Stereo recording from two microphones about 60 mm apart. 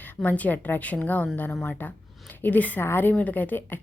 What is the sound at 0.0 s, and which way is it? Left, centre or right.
A woman's voice, left.